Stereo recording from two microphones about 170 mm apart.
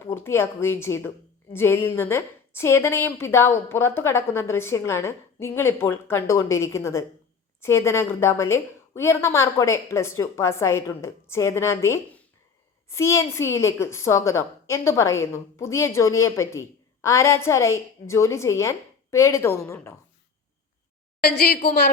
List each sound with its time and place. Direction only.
0.0 s a woman's voice: 15° left (ahead or behind)
21.2 s a woman's voice: 65° left (ahead or behind)